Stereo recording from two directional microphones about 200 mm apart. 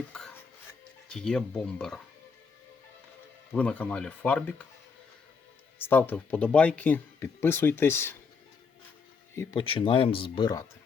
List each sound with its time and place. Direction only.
0.1 s whispering: 5° left (ahead or behind)
1.0 s speech: 5° left (ahead or behind)
3.5 s speech: 5° left (ahead or behind)
5.8 s speech: 10° left (ahead or behind)
9.3 s speech: 10° left (ahead or behind)
9.6 s speech: 25° left (ahead or behind)